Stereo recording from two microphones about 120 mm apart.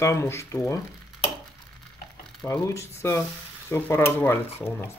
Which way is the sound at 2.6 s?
25° left (ahead or behind).